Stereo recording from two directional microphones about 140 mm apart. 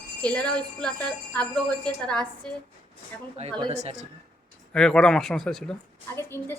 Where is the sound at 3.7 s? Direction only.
55° right (ahead or behind).